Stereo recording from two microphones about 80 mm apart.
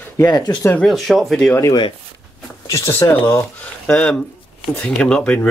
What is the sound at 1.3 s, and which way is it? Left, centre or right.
Speech, centre.